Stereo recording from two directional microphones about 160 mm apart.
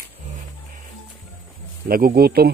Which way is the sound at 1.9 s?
65° right (ahead or behind).